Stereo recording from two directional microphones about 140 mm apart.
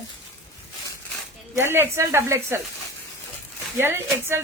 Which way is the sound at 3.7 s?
15° right (ahead or behind).